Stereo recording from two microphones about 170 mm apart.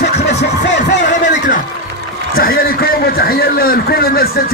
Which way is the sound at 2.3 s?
60° left (ahead or behind).